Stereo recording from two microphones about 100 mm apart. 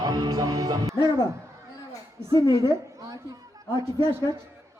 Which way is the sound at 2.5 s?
30° right (ahead or behind).